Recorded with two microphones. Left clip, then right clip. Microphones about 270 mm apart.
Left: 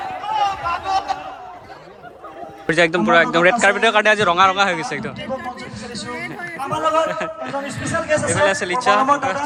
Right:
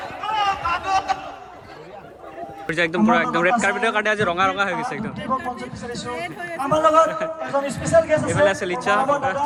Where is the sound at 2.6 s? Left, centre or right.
Centre.